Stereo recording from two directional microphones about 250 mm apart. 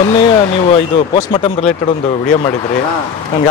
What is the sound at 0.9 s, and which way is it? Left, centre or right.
Speech, centre.